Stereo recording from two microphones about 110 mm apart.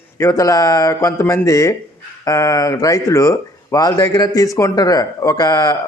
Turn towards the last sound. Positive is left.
turn(degrees=35)  # may be behind; listen again after turning